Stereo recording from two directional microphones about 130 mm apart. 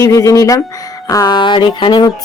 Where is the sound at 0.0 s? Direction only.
25° left (ahead or behind).